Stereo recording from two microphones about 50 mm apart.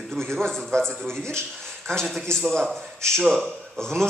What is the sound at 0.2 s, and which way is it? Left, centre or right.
A man's voice, centre.